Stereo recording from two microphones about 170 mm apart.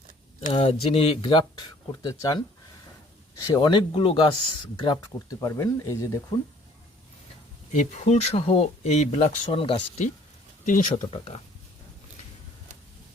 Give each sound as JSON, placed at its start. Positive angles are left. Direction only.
{"t": 0.4, "sound": "speech", "side_deg": 35}
{"t": 3.4, "sound": "speech", "side_deg": 25}
{"t": 7.7, "sound": "speech", "side_deg": 40}
{"t": 10.7, "sound": "speech", "side_deg": 45}